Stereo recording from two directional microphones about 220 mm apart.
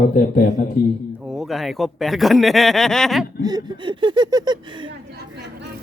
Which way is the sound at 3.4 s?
20° right (ahead or behind).